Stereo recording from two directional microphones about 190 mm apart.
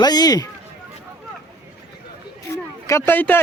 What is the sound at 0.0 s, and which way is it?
Speech, 20° left (ahead or behind).